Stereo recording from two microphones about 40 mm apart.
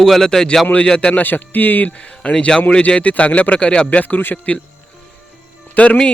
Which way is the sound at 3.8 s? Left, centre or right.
Left.